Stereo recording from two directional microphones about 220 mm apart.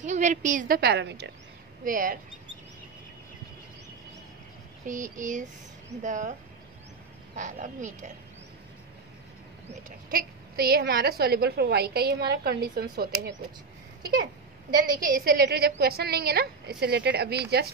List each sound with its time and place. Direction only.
0.0 s a woman's voice: 35° right (ahead or behind); by 1.3 s 50° right (ahead or behind)
1.9 s a woman's voice: 40° right (ahead or behind)
4.8 s a woman's voice: 35° right (ahead or behind)
7.3 s a woman's voice: 35° right (ahead or behind)
9.7 s a woman's voice: 35° right (ahead or behind)
15.0 s a woman's voice: 40° right (ahead or behind)